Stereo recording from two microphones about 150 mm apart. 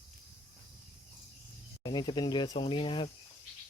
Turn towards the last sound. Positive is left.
turn(degrees=35)  # may be behind; listen again after turning